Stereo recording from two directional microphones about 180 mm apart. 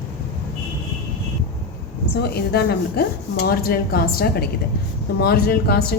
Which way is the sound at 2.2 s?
60° left (ahead or behind).